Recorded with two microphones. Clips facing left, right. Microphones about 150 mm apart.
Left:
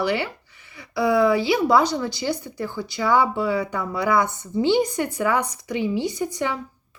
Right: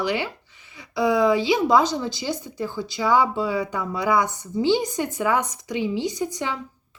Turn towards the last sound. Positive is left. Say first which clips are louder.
# left 1 dB
turn(degrees=-15)  # may be behind; listen again after turning